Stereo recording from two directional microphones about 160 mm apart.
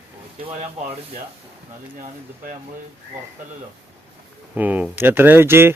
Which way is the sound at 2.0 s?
50° right (ahead or behind).